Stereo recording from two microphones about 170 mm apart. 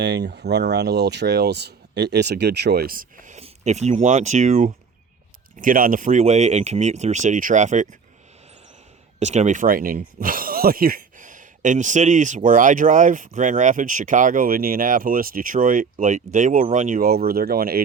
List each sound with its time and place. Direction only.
0.0 s speech: 85° right; by 4.7 s 45° right (ahead or behind)
5.5 s speech: 55° right (ahead or behind)
9.1 s speech: 40° right (ahead or behind)
17.0 s speech: 65° right (ahead or behind)